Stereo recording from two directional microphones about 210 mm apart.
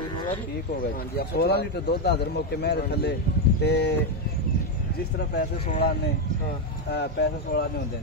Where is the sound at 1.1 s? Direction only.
50° left (ahead or behind).